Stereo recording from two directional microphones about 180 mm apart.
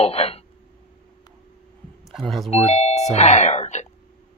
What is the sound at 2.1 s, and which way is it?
Speech, centre (ahead or behind).